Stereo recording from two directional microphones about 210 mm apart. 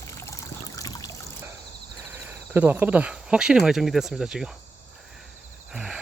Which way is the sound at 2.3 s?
10° right (ahead or behind).